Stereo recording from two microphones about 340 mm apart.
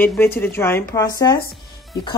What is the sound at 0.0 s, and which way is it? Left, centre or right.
Speech, centre.